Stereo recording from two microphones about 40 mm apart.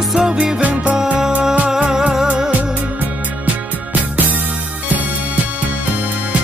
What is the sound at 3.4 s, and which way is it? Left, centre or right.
Music, right.